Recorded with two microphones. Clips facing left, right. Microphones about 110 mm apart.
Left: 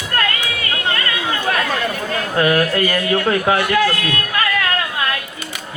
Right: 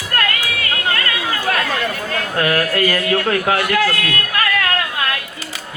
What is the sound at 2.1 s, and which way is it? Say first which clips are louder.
A man's voice: left 3 dB; 25° left (ahead or behind).